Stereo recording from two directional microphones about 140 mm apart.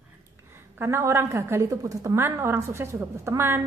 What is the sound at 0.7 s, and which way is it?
A woman's voice, 15° right (ahead or behind).